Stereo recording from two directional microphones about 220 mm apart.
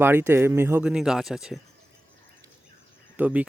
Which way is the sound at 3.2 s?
5° right (ahead or behind).